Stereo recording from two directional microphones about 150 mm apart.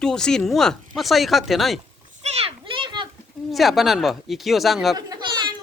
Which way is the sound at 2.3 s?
40° right (ahead or behind).